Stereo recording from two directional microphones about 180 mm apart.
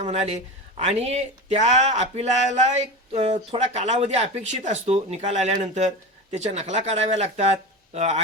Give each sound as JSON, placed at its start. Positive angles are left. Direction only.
{"t": 0.0, "sound": "speech", "side_deg": -35}